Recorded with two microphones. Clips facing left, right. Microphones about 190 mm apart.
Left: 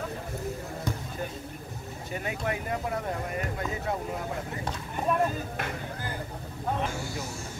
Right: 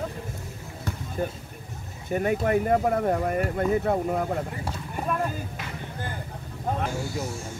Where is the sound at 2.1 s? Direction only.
45° right (ahead or behind).